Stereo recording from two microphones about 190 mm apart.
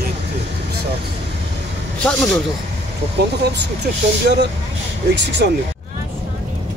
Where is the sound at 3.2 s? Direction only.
60° right (ahead or behind).